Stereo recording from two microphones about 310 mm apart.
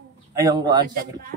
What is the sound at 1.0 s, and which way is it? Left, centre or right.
Speech, right.